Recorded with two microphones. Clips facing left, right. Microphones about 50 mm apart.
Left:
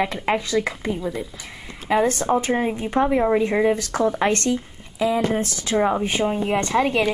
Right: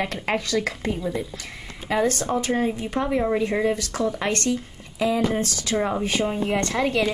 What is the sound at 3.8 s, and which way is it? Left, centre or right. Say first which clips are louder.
Speech: left 4 dB; left.